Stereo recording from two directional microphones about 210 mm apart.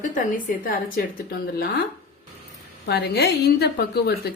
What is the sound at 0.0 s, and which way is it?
A woman's voice, 35° left (ahead or behind).